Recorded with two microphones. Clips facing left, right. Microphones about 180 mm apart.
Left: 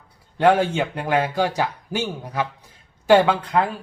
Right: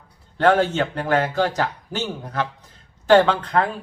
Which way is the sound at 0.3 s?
10° left (ahead or behind).